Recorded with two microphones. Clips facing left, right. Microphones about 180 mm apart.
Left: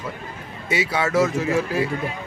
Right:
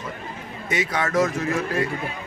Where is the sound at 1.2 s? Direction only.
30° left (ahead or behind).